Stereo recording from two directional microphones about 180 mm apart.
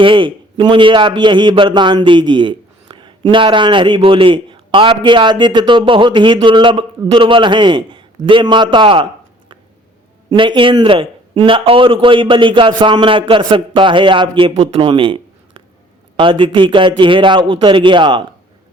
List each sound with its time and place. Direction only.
0.0 s a man's voice: 30° right (ahead or behind)
10.2 s a man's voice: 25° right (ahead or behind)